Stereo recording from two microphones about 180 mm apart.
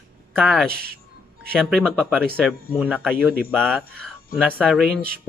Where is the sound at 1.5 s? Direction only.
5° left (ahead or behind).